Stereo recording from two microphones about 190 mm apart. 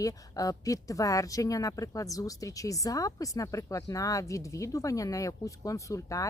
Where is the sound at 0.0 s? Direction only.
20° left (ahead or behind).